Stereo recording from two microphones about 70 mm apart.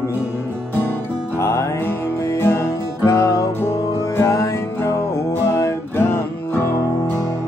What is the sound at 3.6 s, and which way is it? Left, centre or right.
Music, left.